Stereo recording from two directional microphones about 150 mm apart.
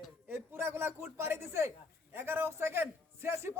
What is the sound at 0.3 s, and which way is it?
A man's voice, 15° right (ahead or behind).